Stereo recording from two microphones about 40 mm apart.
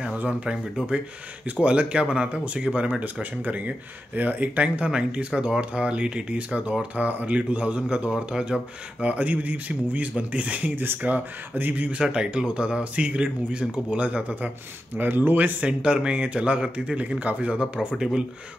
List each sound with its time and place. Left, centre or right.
0.2 s speech: right
1.6 s speech: right
4.8 s speech: right
9.0 s speech: right
12.0 s speech: right
15.0 s speech: right
15.6 s speech: right
17.9 s speech: centre